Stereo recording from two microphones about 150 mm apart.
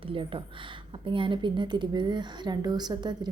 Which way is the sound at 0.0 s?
35° right (ahead or behind).